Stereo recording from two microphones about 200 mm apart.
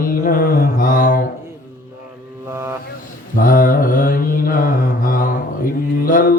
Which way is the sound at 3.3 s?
45° left (ahead or behind).